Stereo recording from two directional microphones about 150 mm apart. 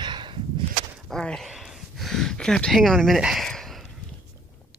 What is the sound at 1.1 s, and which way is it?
Speech, 5° left (ahead or behind).